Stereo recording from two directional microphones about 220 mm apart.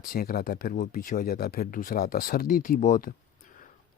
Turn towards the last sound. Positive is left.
turn(degrees=35)  # may be behind; listen again after turning